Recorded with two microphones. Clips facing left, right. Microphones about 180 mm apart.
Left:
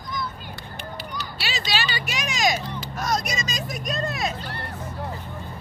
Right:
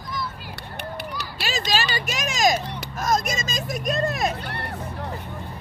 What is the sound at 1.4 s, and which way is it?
Speech, 45° right (ahead or behind).